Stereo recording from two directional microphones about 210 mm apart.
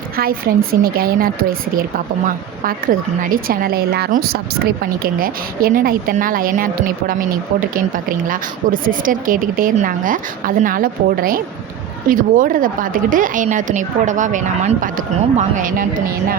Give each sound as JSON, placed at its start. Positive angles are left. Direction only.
{"t": 0.2, "sound": "a woman's voice", "side_deg": -45}
{"t": 7.9, "sound": "speech", "side_deg": -40}